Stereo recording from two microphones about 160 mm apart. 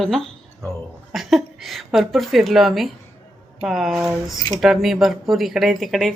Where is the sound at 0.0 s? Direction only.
Centre (ahead or behind).